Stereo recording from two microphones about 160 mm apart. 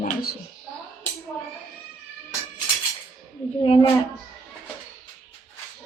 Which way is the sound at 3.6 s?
35° left (ahead or behind).